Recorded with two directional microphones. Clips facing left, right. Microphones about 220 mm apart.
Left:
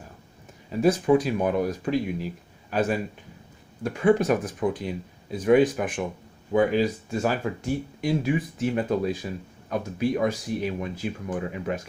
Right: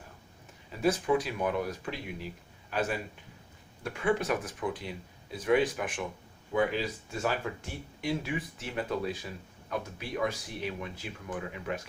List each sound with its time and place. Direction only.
0.8 s a man's voice: 40° left (ahead or behind)
9.2 s speech: 35° left (ahead or behind)